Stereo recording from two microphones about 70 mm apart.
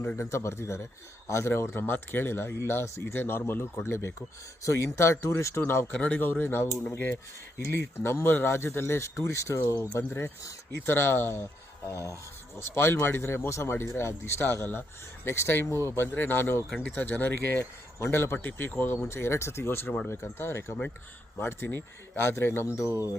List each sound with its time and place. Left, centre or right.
0.2 s speech: left
5.9 s speech: left
10.1 s speech: left
11.9 s speech: left
17.6 s speech: left
22.8 s speech: left